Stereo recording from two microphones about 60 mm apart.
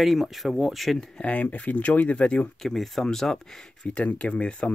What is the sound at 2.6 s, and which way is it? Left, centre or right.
Speech, centre.